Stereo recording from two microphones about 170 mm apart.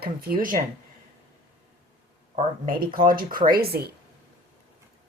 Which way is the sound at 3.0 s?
55° right (ahead or behind).